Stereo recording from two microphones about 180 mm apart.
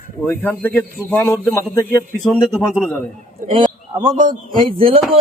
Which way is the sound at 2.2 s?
5° left (ahead or behind).